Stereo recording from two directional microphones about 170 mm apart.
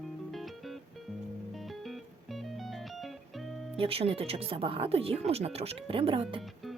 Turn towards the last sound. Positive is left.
turn(degrees=0)  # may be behind; listen again after turning